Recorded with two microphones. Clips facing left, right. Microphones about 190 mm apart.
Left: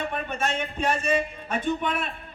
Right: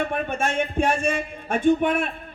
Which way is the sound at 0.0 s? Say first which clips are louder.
Right 4 dB; 50° right (ahead or behind).